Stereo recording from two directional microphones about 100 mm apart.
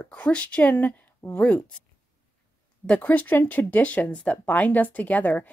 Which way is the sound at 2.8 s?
15° left (ahead or behind).